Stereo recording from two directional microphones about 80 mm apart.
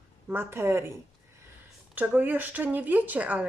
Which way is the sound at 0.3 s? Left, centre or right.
Right.